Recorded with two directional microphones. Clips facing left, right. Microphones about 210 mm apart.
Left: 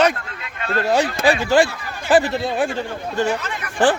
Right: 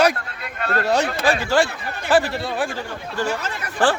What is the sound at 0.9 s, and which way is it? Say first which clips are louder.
Speech: left 3 dB; 10° left (ahead or behind).